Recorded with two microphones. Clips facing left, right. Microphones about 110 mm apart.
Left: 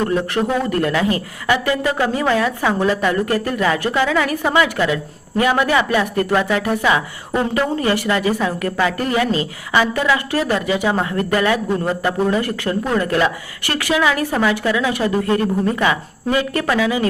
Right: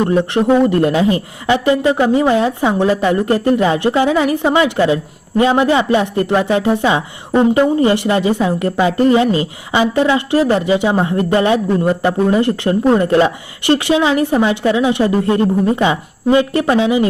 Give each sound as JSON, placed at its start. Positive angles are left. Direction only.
{"t": 0.0, "sound": "speech", "side_deg": -25}